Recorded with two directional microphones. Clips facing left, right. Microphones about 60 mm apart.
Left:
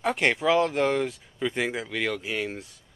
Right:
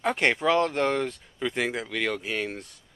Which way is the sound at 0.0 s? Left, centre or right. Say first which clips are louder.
Even; centre.